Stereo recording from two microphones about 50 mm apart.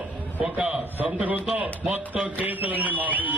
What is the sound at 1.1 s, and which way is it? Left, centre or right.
A man's voice, right.